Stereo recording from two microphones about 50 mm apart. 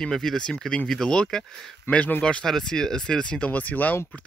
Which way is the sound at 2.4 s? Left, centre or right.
Centre.